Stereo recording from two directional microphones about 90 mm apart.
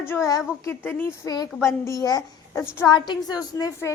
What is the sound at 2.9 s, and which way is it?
Speech, 55° left (ahead or behind).